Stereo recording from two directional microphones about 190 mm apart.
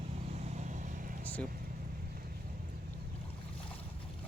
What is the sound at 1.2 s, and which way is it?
Speech, 10° left (ahead or behind).